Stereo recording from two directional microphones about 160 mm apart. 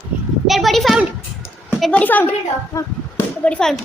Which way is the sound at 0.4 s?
Centre (ahead or behind).